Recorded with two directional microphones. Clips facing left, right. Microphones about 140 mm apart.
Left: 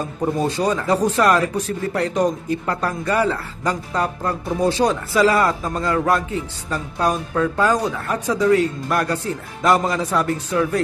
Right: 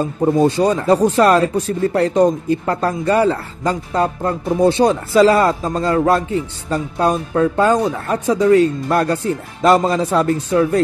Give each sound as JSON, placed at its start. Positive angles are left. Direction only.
{"t": 0.4, "sound": "speech", "side_deg": -30}